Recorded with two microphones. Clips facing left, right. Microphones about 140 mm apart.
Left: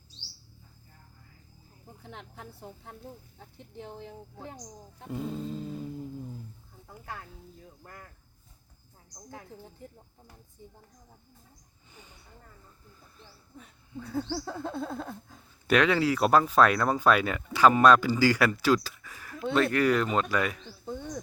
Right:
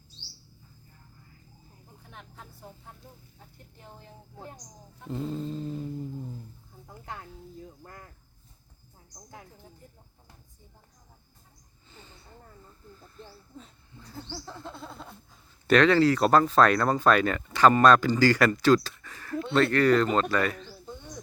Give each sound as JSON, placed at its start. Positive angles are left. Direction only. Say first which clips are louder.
{"t": 5.0, "sound": "speech", "louder": "right 2 dB", "side_deg": 10}
{"t": 7.0, "sound": "speech", "louder": "right 1 dB", "side_deg": -20}
{"t": 11.9, "sound": "a sound", "louder": "right 2 dB", "side_deg": 15}
{"t": 14.2, "sound": "bird", "louder": "left 8 dB", "side_deg": 65}
{"t": 15.6, "sound": "speech", "louder": "right 4 dB", "side_deg": 10}